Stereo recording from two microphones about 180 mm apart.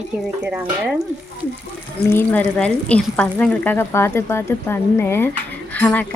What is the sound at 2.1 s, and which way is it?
Speech, 10° left (ahead or behind).